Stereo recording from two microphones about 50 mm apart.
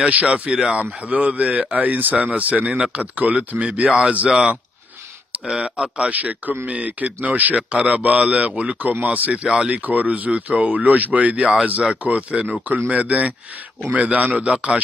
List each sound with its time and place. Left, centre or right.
0.0 s speech: right
2.6 s speech: centre
3.0 s speech: right
5.6 s speech: centre
6.0 s speech: right
9.8 s speech: right